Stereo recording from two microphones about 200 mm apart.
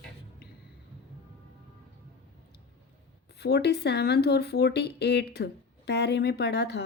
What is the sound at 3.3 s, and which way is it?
Speech, 55° left (ahead or behind).